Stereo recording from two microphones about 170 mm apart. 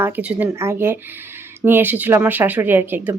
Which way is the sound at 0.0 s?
10° right (ahead or behind).